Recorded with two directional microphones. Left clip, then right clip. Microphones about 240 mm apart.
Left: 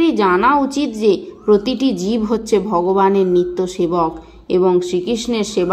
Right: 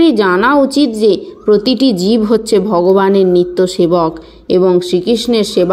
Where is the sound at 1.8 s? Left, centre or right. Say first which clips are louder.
Right 6 dB; right.